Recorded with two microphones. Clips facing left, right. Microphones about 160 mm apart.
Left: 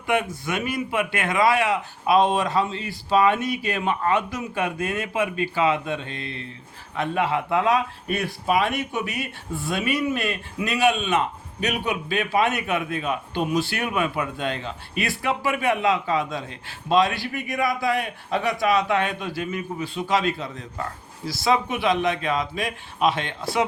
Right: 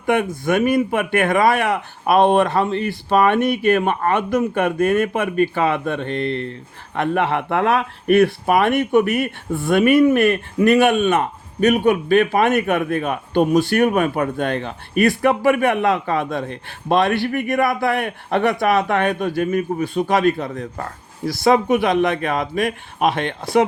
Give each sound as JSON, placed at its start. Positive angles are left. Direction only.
{"t": 0.0, "sound": "speech", "side_deg": -50}